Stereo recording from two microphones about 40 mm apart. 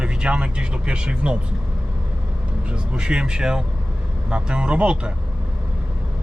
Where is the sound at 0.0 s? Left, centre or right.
Right.